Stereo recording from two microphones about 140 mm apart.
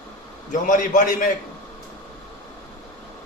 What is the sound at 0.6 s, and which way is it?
Speech, 70° left (ahead or behind).